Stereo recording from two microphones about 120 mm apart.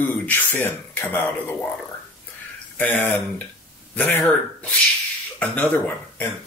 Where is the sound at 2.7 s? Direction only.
15° left (ahead or behind).